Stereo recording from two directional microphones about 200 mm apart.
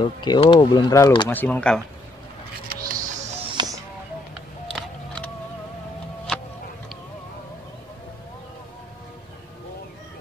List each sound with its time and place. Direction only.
0.0 s speech: 25° left (ahead or behind)
1.3 s speech: 10° left (ahead or behind)
2.7 s music: 45° right (ahead or behind)
3.3 s music: 25° right (ahead or behind)
4.7 s a sound: 5° left (ahead or behind)